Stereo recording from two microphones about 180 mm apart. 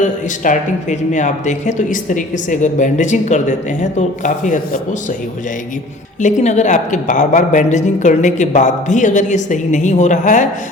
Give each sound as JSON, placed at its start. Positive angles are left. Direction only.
{"t": 0.0, "sound": "speech", "side_deg": 45}
{"t": 6.1, "sound": "speech", "side_deg": 40}